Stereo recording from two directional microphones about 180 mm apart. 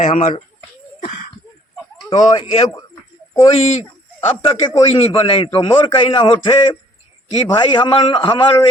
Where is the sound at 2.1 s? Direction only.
35° left (ahead or behind).